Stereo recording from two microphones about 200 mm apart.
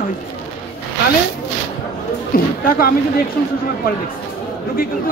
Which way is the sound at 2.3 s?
45° left (ahead or behind).